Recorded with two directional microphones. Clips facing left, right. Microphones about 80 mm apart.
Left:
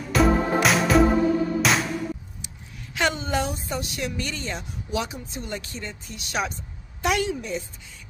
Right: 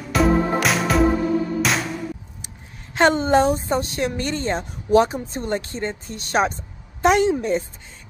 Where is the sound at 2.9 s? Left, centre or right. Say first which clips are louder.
Right 9 dB; right.